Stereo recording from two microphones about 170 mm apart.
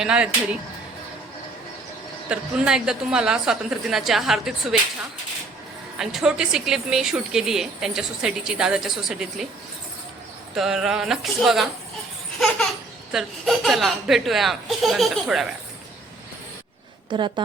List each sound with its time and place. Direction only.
0.0 s speech: 5° right (ahead or behind)
2.3 s speech: 5° right (ahead or behind)
6.0 s speech: 5° right (ahead or behind)
10.5 s speech: centre (ahead or behind)
13.1 s speech: centre (ahead or behind)
17.1 s a woman's voice: 30° right (ahead or behind)